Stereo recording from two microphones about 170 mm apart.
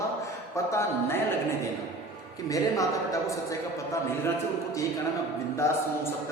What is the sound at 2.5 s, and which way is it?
Speech, 20° left (ahead or behind).